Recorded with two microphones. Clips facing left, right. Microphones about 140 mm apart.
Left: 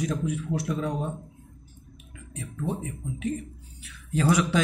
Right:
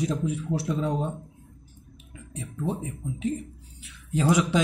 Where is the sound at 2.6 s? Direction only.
25° right (ahead or behind).